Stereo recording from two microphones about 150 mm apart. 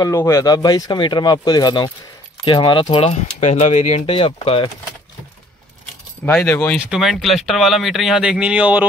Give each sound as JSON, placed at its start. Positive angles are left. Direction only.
{"t": 0.0, "sound": "speech", "side_deg": 20}
{"t": 6.3, "sound": "speech", "side_deg": 10}
{"t": 6.9, "sound": "speech", "side_deg": 0}